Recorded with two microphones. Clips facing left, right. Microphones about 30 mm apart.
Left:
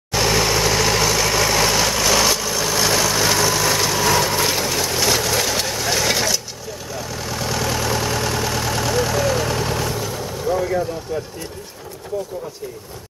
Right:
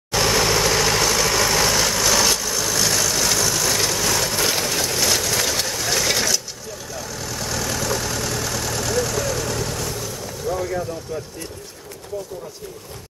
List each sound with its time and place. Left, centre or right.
0.1 s vehicle: centre